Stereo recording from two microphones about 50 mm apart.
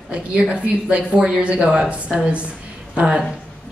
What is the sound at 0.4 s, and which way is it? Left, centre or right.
Speech, right.